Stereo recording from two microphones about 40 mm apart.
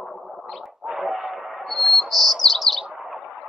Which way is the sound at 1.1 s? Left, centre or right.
Centre.